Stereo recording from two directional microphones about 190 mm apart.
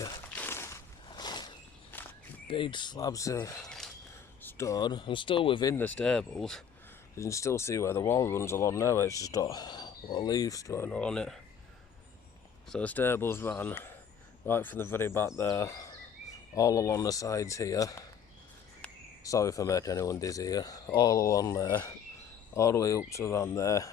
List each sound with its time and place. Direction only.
0.3 s walk: 10° left (ahead or behind)
1.9 s walk: 10° left (ahead or behind)
2.5 s speech: 25° left (ahead or behind)
3.6 s a sound: 5° left (ahead or behind)
4.4 s speech: 15° left (ahead or behind)
5.7 s speech: 10° left (ahead or behind)
7.2 s speech: 15° left (ahead or behind)
12.7 s speech: 10° left (ahead or behind)
19.2 s speech: 15° left (ahead or behind)